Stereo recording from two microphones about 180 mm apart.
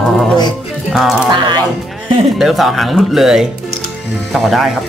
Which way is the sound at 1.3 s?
25° right (ahead or behind).